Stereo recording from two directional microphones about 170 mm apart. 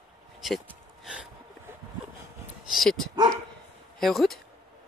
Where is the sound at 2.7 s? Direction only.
Centre (ahead or behind).